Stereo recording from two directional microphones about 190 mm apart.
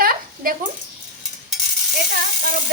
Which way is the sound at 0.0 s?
50° right (ahead or behind).